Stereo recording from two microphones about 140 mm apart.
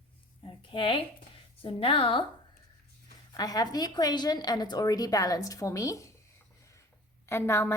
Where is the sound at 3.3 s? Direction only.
25° left (ahead or behind).